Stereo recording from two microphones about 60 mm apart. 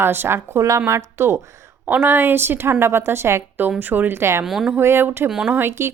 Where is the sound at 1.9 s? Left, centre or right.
Right.